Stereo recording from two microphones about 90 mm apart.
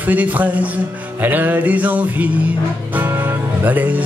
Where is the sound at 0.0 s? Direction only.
15° right (ahead or behind).